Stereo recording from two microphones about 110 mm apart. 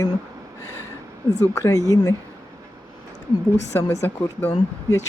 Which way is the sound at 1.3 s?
30° left (ahead or behind).